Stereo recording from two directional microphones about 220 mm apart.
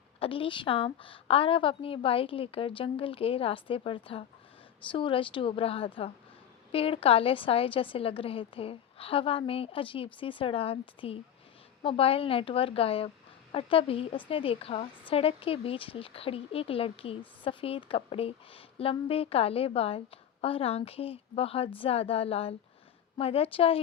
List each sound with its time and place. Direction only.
0.2 s speech: 25° left (ahead or behind)